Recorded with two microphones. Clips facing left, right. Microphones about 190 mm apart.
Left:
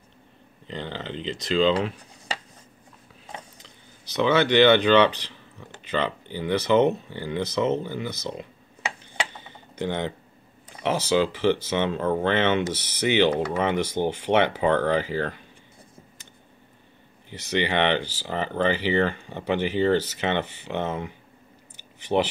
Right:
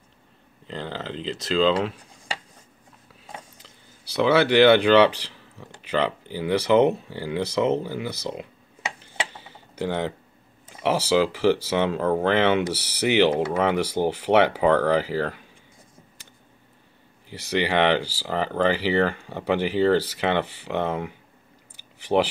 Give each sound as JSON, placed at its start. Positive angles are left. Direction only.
{"t": 0.7, "sound": "speech", "side_deg": 0}
{"t": 3.3, "sound": "speech", "side_deg": -5}
{"t": 9.4, "sound": "tick-tock", "side_deg": -5}
{"t": 10.8, "sound": "speech", "side_deg": -10}
{"t": 17.3, "sound": "speech", "side_deg": -10}
{"t": 22.1, "sound": "speech", "side_deg": -25}